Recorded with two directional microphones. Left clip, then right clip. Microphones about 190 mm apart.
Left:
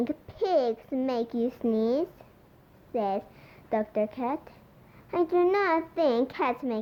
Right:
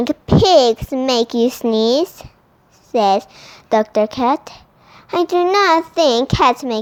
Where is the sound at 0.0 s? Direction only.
35° right (ahead or behind).